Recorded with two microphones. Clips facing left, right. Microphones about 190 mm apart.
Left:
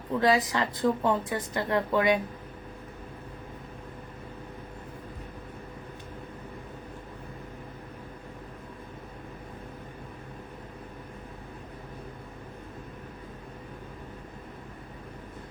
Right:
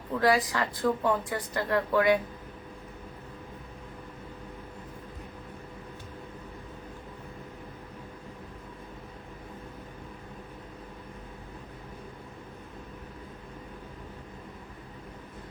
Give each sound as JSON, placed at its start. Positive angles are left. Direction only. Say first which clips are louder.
{"t": 0.2, "sound": "a woman's voice", "louder": "left 1 dB", "side_deg": 20}